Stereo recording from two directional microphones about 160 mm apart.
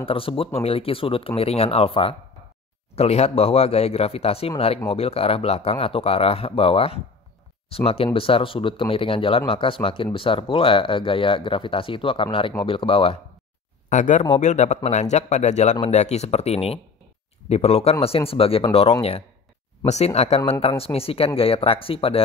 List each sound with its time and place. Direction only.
0.0 s speech: 35° left (ahead or behind)
13.8 s speech: 50° left (ahead or behind)